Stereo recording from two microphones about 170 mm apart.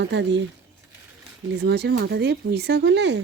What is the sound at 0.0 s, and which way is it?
Speech, 90° right.